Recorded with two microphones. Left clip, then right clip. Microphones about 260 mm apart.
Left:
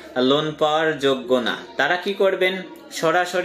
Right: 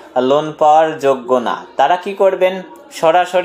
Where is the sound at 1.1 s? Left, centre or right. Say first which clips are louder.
Right 6 dB; right.